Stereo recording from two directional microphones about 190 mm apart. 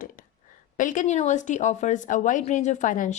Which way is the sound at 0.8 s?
40° left (ahead or behind).